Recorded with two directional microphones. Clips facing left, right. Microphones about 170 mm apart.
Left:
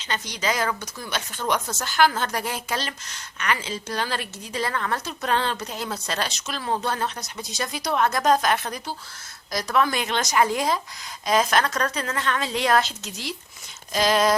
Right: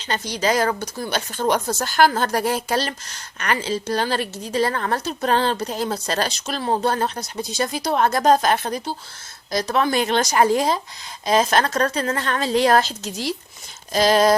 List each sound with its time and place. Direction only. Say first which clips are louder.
0.0 s speech: right 5 dB; 35° right (ahead or behind)